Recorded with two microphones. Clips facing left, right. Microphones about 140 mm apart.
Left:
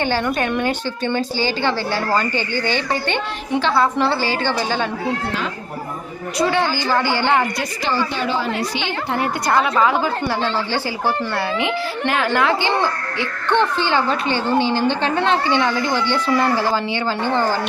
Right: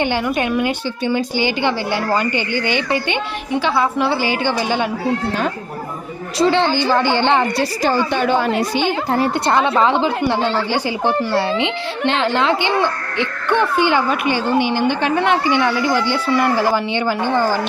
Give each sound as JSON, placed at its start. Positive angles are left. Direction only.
{"t": 0.3, "sound": "a woman's voice", "side_deg": -15}
{"t": 4.2, "sound": "speech", "side_deg": -15}
{"t": 6.4, "sound": "a child's voice", "side_deg": -20}
{"t": 7.9, "sound": "a woman's voice", "side_deg": -50}
{"t": 9.1, "sound": "a woman's voice", "side_deg": -30}